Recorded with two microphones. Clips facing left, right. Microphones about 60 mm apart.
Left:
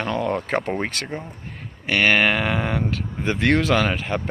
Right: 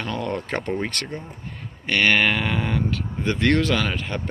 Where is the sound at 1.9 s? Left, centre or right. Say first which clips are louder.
Left 1 dB; centre.